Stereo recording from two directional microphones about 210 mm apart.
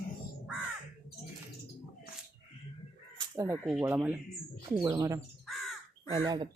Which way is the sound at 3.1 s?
15° right (ahead or behind).